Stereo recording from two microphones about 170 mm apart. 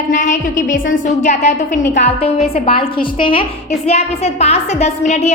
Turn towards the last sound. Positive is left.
turn(degrees=40)  # may be behind; listen again after turning